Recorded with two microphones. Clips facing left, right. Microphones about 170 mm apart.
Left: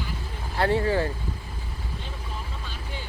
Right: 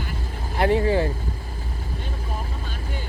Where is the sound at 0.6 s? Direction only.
15° right (ahead or behind).